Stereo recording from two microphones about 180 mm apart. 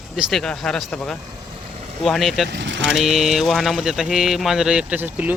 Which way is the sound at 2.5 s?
75° right (ahead or behind).